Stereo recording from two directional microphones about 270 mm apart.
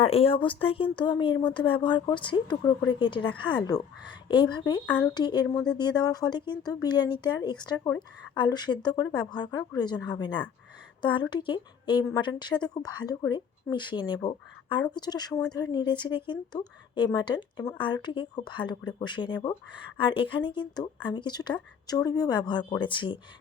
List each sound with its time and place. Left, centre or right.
0.0 s speech: left